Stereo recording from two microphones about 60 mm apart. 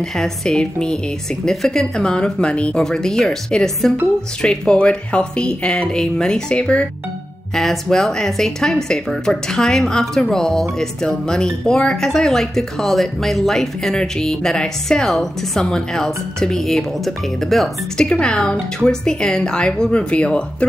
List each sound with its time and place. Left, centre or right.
0.0 s speech: centre
2.8 s speech: centre
7.5 s speech: centre